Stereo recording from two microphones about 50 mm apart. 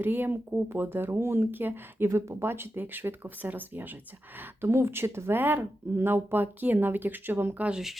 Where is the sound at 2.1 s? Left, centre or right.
Right.